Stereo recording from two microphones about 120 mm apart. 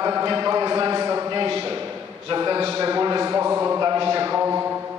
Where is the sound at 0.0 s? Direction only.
30° right (ahead or behind).